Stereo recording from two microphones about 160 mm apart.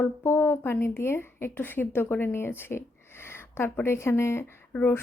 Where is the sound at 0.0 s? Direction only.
15° left (ahead or behind).